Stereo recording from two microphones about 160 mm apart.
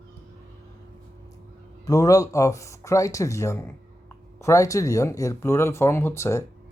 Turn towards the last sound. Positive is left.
turn(degrees=15)  # may be behind; listen again after turning